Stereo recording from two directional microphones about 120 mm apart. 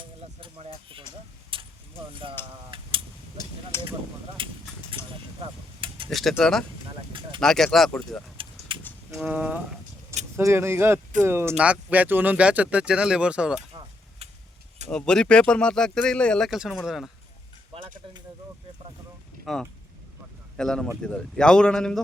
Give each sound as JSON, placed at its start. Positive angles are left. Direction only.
{"t": 0.0, "sound": "a sound", "side_deg": -45}
{"t": 1.5, "sound": "vehicle", "side_deg": -45}
{"t": 2.2, "sound": "speech", "side_deg": -45}
{"t": 2.6, "sound": "a sound", "side_deg": -45}
{"t": 3.7, "sound": "speech", "side_deg": 20}
{"t": 4.4, "sound": "speech", "side_deg": -45}
{"t": 5.0, "sound": "vehicle", "side_deg": 20}
{"t": 6.1, "sound": "speech", "side_deg": 0}
{"t": 7.1, "sound": "speech", "side_deg": -45}
{"t": 7.3, "sound": "speech", "side_deg": 5}
{"t": 8.4, "sound": "keys jangling", "side_deg": -45}
{"t": 9.1, "sound": "speech", "side_deg": -10}
{"t": 14.8, "sound": "speech", "side_deg": 5}
{"t": 19.5, "sound": "a man's voice", "side_deg": 0}